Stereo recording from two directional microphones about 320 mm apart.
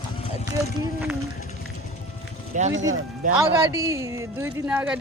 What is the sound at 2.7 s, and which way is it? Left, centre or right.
Speech, right.